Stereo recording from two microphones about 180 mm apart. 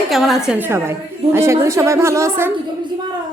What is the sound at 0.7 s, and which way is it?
A woman's voice, 15° right (ahead or behind).